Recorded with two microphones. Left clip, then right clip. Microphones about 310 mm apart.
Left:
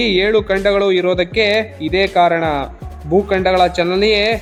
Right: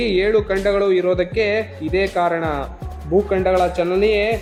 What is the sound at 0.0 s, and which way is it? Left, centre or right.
A man's voice, left.